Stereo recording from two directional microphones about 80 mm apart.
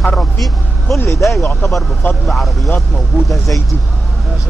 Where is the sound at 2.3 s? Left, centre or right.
Centre.